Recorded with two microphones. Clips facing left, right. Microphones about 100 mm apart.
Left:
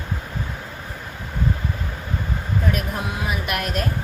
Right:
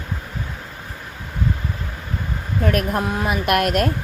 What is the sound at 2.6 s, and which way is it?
Speech, 55° right (ahead or behind).